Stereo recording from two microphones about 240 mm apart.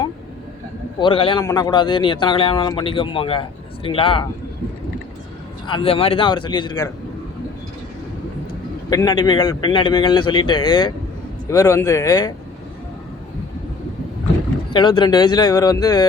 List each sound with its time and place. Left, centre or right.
0.9 s a man's voice: left
5.6 s a man's voice: left
8.9 s a man's voice: centre
14.7 s a man's voice: centre